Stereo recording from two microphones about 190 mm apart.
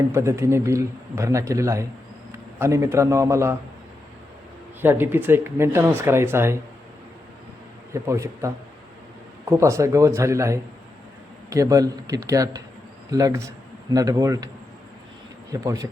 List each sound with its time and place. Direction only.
0.1 s speech: 15° right (ahead or behind)
4.8 s speech: 10° right (ahead or behind)
7.9 s a man's voice: 15° right (ahead or behind)
15.6 s speech: 20° right (ahead or behind)